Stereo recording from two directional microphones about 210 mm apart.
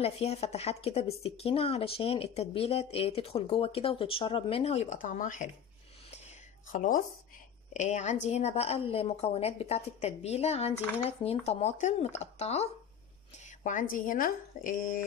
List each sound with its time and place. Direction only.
0.0 s speech: 30° left (ahead or behind)
6.7 s a woman's voice: 40° left (ahead or behind)
14.0 s a woman's voice: 40° left (ahead or behind)